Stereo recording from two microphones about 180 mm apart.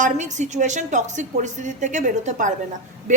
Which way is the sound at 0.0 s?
40° right (ahead or behind).